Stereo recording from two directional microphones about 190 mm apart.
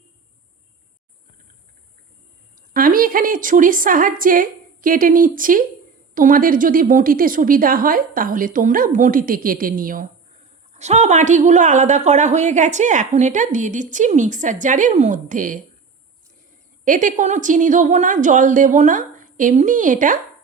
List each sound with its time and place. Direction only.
2.7 s a woman's voice: 50° right (ahead or behind)
10.8 s a woman's voice: 35° right (ahead or behind)
16.8 s a woman's voice: 45° right (ahead or behind)